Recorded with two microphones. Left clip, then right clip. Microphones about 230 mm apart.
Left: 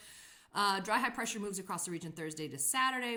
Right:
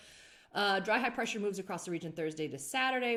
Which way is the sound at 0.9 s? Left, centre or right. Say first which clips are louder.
Right 1 dB; centre.